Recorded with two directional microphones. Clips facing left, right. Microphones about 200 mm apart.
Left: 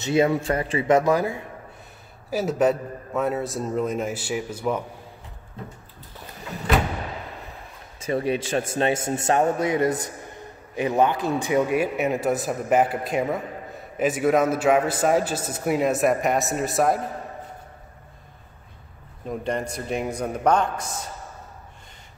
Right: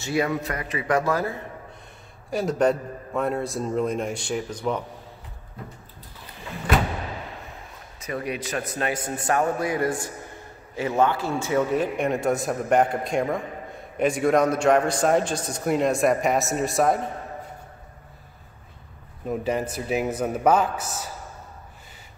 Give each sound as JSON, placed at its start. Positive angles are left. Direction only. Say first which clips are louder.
{"t": 0.0, "sound": "a man's voice", "louder": "left 4 dB", "side_deg": 25}
{"t": 2.3, "sound": "a man's voice", "louder": "left 1 dB", "side_deg": 5}
{"t": 8.0, "sound": "a man's voice", "louder": "left 6 dB", "side_deg": 30}
{"t": 19.2, "sound": "a man's voice", "louder": "right 2 dB", "side_deg": -5}